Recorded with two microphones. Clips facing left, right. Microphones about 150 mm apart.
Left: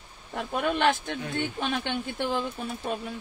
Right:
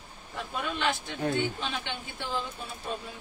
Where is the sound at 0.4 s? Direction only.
55° left (ahead or behind).